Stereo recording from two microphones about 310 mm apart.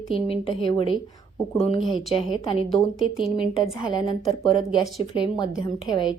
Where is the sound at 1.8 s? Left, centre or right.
Centre.